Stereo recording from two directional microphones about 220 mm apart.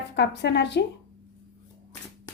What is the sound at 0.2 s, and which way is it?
Speech, 50° left (ahead or behind).